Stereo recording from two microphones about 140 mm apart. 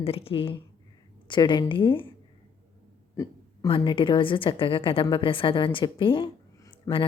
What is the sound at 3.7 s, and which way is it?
Speech, 40° left (ahead or behind).